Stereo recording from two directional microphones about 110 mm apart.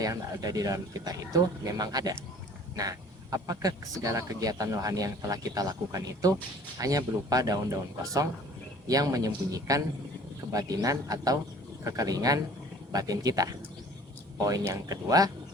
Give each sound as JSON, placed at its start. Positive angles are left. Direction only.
{"t": 0.0, "sound": "speech", "side_deg": -35}
{"t": 14.7, "sound": "speech", "side_deg": -35}